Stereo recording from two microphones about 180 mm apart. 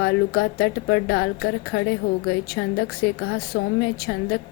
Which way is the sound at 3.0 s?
60° left (ahead or behind).